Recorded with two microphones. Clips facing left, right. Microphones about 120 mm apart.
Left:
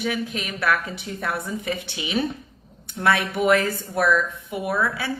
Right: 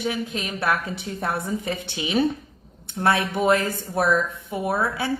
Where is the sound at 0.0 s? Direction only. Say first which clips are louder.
Even; 25° right (ahead or behind).